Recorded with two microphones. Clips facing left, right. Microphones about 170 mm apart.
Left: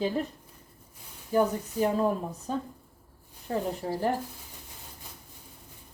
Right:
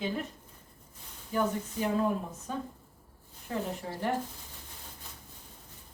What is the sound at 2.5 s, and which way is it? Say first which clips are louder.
Speech: left 4 dB; 35° left (ahead or behind).